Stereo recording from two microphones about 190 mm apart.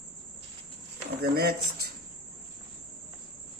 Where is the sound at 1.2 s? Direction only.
55° right (ahead or behind).